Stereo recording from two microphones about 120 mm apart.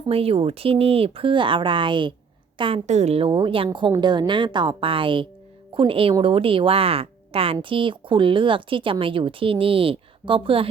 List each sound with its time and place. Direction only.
0.1 s speech: 55° right (ahead or behind)
2.8 s a woman's voice: 70° right (ahead or behind); by 10.7 s 45° right (ahead or behind)